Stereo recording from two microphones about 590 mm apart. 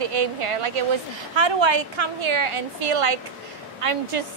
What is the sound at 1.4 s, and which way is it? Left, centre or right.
A woman's voice, right.